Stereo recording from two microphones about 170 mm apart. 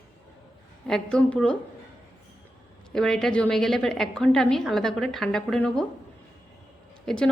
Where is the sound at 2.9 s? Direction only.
5° left (ahead or behind).